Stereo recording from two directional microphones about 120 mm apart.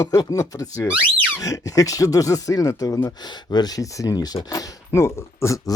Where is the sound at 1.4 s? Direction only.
30° left (ahead or behind).